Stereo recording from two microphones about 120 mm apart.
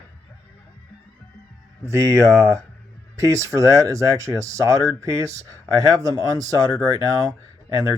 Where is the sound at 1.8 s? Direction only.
25° right (ahead or behind).